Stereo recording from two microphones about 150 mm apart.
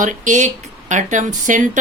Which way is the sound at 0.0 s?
55° right (ahead or behind).